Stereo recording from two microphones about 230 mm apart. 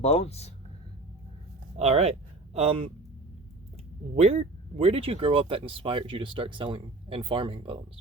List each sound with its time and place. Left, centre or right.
0.0 s speech: left
1.7 s speech: right
4.1 s speech: right